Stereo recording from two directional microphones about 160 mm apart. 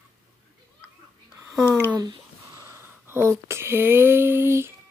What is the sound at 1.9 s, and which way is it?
Speech, 25° right (ahead or behind).